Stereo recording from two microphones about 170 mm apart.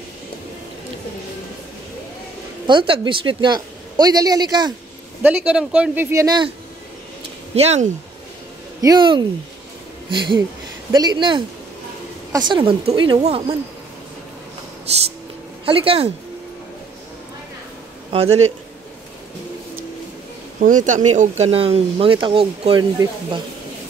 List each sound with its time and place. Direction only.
2.6 s a woman's voice: 30° right (ahead or behind)
5.2 s speech: 5° right (ahead or behind); by 6.5 s 25° right (ahead or behind)
7.5 s speech: 40° right (ahead or behind)
8.8 s a woman's voice: 25° right (ahead or behind)
15.6 s speech: 30° right (ahead or behind)
18.1 s speech: 35° right (ahead or behind)
20.6 s speech: 50° right (ahead or behind); by 23.4 s 25° right (ahead or behind)